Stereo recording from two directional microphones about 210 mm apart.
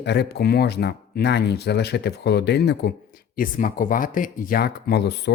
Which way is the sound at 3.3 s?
40° left (ahead or behind).